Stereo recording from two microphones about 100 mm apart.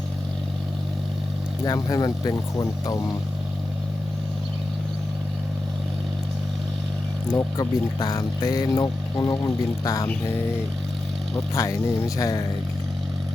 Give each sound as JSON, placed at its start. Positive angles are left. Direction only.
{"t": 1.6, "sound": "speech", "side_deg": 40}
{"t": 7.3, "sound": "speech", "side_deg": 35}
{"t": 11.5, "sound": "speech", "side_deg": 30}